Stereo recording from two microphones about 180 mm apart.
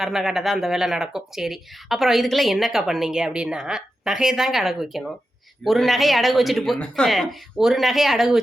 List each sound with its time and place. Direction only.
0.0 s speech: centre (ahead or behind)